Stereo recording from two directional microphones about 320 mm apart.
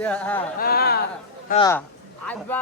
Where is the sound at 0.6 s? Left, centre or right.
Left.